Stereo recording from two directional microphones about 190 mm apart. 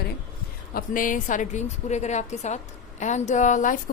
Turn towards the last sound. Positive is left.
turn(degrees=40)  # may be behind; listen again after turning